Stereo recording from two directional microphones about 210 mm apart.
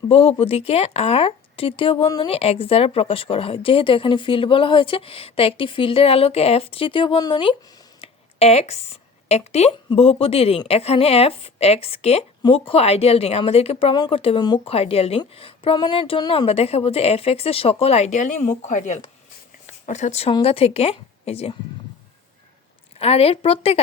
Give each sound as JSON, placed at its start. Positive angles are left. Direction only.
{"t": 0.1, "sound": "a woman's voice", "side_deg": 25}
{"t": 8.0, "sound": "a sound", "side_deg": 30}
{"t": 9.3, "sound": "a woman's voice", "side_deg": 30}
{"t": 23.0, "sound": "a woman's voice", "side_deg": 30}